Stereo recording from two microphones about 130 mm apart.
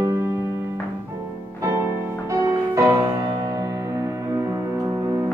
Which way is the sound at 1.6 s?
20° right (ahead or behind).